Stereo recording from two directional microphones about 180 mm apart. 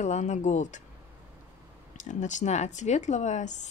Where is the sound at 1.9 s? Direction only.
40° left (ahead or behind).